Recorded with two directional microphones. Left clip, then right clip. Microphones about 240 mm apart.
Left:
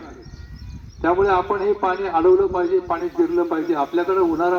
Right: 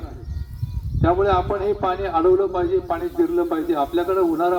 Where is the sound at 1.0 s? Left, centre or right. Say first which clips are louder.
Left 1 dB; centre.